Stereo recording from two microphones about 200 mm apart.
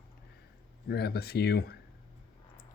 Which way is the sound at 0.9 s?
50° left (ahead or behind).